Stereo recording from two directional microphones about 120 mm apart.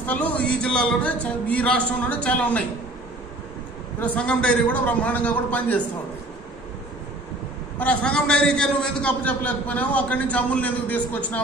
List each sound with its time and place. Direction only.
0.0 s a man's voice: 15° left (ahead or behind)
4.0 s a man's voice: 10° left (ahead or behind)
7.8 s a man's voice: 10° left (ahead or behind)